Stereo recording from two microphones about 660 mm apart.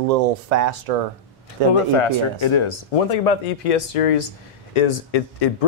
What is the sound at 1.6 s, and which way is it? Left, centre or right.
Speech, right.